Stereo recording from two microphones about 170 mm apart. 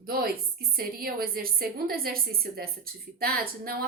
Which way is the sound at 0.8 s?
60° right (ahead or behind).